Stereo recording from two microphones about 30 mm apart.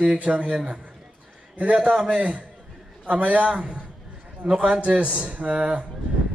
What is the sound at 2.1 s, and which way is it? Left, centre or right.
A man's voice, right.